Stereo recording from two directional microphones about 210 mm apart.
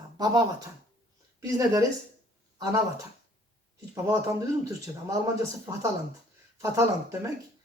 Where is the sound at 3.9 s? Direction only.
15° right (ahead or behind).